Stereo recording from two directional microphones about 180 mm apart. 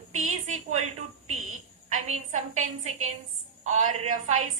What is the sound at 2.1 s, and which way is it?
A woman's voice, 40° right (ahead or behind).